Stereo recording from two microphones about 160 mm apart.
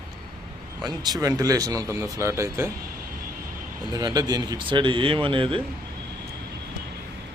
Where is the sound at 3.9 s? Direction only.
25° right (ahead or behind).